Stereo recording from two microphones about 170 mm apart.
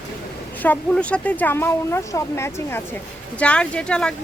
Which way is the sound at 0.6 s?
5° left (ahead or behind).